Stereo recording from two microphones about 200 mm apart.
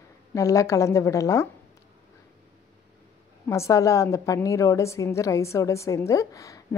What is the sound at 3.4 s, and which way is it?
A woman's voice, 15° left (ahead or behind).